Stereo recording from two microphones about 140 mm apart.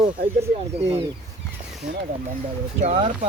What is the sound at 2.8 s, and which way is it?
Speech, 50° right (ahead or behind).